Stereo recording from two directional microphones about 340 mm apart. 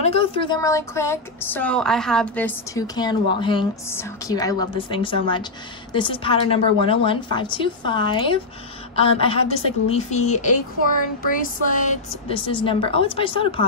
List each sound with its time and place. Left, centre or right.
0.0 s speech: centre